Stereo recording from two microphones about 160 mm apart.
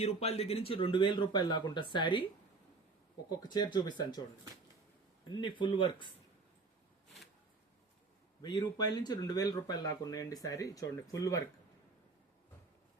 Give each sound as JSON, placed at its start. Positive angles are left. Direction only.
{"t": 0.0, "sound": "speech", "side_deg": 40}
{"t": 3.2, "sound": "speech", "side_deg": 25}
{"t": 5.3, "sound": "speech", "side_deg": 30}
{"t": 8.4, "sound": "speech", "side_deg": 25}